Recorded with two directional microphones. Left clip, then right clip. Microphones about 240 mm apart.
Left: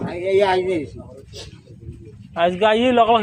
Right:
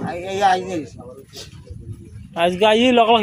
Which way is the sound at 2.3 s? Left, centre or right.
Right.